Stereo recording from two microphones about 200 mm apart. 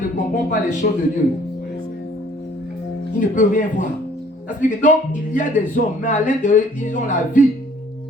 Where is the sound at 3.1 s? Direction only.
40° left (ahead or behind).